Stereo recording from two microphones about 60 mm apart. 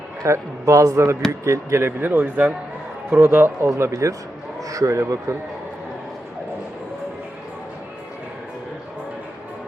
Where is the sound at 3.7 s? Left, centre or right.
Right.